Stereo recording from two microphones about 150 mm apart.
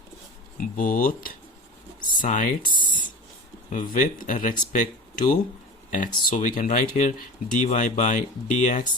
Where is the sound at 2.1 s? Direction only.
60° left (ahead or behind).